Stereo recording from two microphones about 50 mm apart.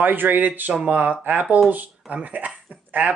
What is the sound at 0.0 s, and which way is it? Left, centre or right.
Speech, right.